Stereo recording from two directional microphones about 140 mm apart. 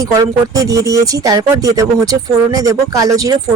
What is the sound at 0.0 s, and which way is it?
Speech, 25° right (ahead or behind).